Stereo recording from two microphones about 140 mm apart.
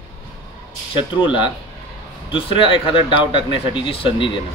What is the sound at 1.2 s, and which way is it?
Speech, 35° left (ahead or behind).